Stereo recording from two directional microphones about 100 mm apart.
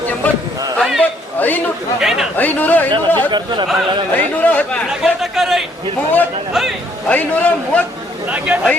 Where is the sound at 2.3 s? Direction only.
15° left (ahead or behind).